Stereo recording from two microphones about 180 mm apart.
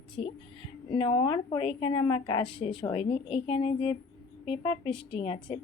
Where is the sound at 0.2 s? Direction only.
35° left (ahead or behind).